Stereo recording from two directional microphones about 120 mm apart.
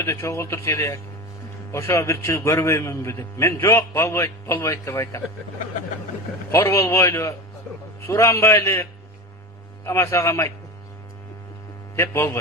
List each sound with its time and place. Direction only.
0.0 s a man's voice: 25° left (ahead or behind)
6.5 s a man's voice: 25° left (ahead or behind)
11.9 s a man's voice: 20° left (ahead or behind)